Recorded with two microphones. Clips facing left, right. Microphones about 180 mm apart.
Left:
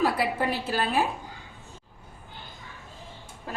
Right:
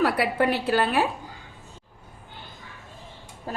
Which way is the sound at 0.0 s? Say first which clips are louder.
Right 3 dB; 65° right (ahead or behind).